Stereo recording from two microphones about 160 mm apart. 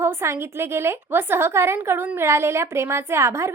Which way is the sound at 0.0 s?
15° right (ahead or behind).